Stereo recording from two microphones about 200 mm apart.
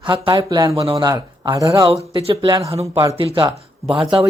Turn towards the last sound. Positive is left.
turn(degrees=-25)  # may be behind; listen again after turning